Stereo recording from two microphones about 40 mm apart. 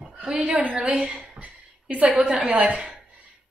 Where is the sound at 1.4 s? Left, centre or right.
Right.